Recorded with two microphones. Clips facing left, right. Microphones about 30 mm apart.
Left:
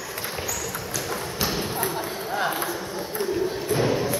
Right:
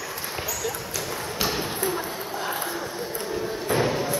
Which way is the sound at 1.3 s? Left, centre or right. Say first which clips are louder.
Right 1 dB; centre.